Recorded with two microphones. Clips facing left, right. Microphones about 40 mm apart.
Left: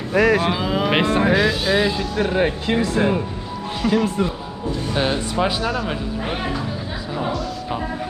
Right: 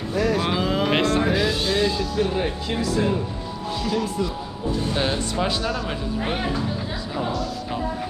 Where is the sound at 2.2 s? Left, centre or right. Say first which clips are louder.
Left 5 dB; left.